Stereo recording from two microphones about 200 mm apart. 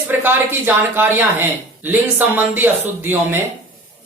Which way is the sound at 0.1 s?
10° right (ahead or behind).